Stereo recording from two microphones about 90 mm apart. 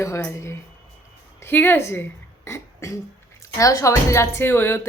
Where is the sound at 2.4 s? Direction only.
35° left (ahead or behind).